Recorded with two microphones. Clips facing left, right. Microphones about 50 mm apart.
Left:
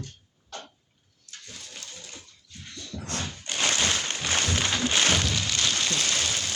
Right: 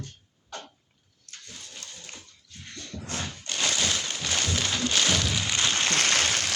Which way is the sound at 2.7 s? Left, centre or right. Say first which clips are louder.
Even; right.